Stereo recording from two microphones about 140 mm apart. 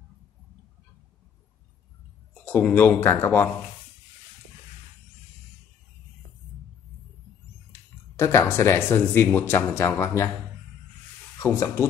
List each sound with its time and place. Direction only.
2.3 s speech: 10° left (ahead or behind)
8.2 s speech: 20° left (ahead or behind)
11.3 s speech: 20° left (ahead or behind)